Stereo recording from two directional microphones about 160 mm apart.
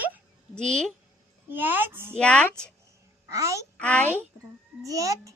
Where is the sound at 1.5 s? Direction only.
10° right (ahead or behind).